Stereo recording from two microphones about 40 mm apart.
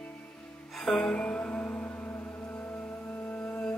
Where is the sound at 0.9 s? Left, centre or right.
Left.